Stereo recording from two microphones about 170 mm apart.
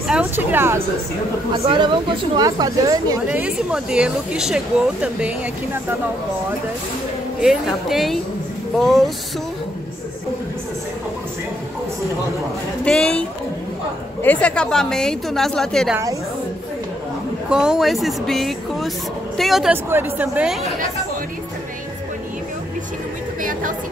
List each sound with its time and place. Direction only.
0.1 s speech: 10° right (ahead or behind)
1.5 s speech: 30° right (ahead or behind)
3.3 s a woman's voice: 5° right (ahead or behind)
7.4 s a woman's voice: centre (ahead or behind)
12.8 s a woman's voice: 5° left (ahead or behind)
17.5 s a woman's voice: 5° right (ahead or behind)